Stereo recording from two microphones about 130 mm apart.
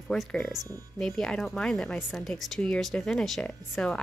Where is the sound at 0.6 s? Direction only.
25° right (ahead or behind).